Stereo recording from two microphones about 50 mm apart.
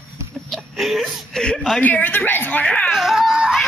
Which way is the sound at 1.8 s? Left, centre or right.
Left.